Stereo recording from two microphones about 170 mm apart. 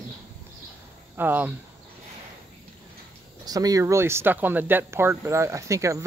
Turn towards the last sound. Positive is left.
turn(degrees=-20)  # may be behind; listen again after turning